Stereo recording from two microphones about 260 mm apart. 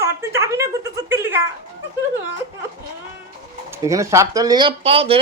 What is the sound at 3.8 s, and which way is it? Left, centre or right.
A woman's voice, centre.